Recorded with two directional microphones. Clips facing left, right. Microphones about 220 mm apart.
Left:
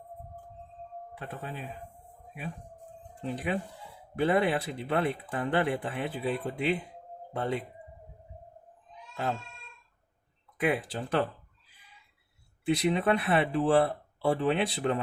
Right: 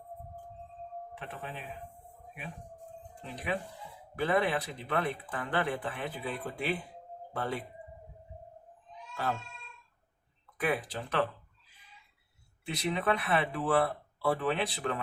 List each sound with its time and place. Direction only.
1.2 s speech: 45° left (ahead or behind)
3.3 s speech: 30° left (ahead or behind)
10.6 s speech: 25° left (ahead or behind)
10.9 s speech: 35° left (ahead or behind)
12.6 s speech: 30° left (ahead or behind)